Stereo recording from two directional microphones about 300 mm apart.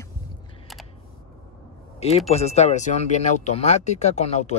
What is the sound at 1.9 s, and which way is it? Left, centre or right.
Speech, left.